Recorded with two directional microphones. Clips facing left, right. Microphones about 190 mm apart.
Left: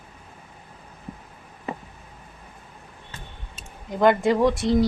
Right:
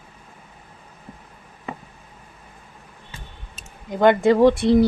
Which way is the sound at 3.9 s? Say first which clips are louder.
Right 3 dB; 25° right (ahead or behind).